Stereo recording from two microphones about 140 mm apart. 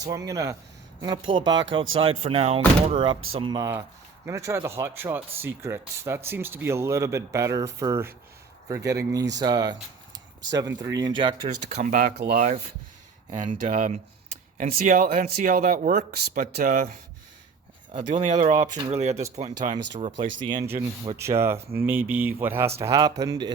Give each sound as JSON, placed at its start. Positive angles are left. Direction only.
{"t": 0.0, "sound": "speech", "side_deg": -25}
{"t": 1.0, "sound": "speech", "side_deg": -35}
{"t": 11.4, "sound": "speech", "side_deg": -55}
{"t": 13.6, "sound": "speech", "side_deg": -70}
{"t": 14.6, "sound": "speech", "side_deg": -80}
{"t": 17.9, "sound": "speech", "side_deg": -60}
{"t": 19.9, "sound": "speech", "side_deg": -45}
{"t": 21.2, "sound": "speech", "side_deg": -20}